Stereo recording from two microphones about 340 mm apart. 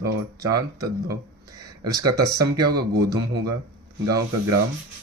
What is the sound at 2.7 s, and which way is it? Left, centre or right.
Music, right.